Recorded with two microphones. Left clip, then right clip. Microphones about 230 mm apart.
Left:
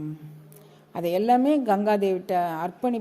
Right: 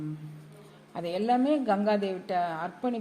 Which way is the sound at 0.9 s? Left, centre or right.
Left.